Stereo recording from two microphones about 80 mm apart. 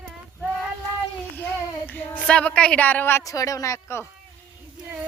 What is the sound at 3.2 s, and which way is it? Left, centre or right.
Speech, left.